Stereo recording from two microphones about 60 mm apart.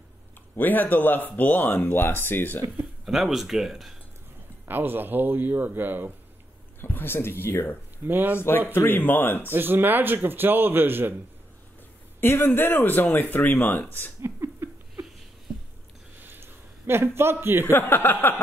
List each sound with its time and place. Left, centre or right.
0.6 s speech: left
3.1 s speech: centre
4.6 s a man's voice: right
6.8 s speech: left
8.0 s a man's voice: right
8.4 s speech: left
9.5 s a man's voice: right
12.2 s speech: left
14.2 s a sound: right
16.2 s a sound: right
17.6 s speech: left